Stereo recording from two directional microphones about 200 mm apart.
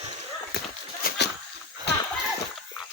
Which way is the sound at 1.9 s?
55° left (ahead or behind).